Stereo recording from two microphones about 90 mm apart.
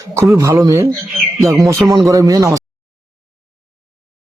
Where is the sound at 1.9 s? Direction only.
40° right (ahead or behind).